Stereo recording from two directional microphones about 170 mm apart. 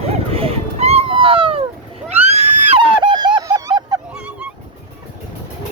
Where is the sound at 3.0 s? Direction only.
25° right (ahead or behind).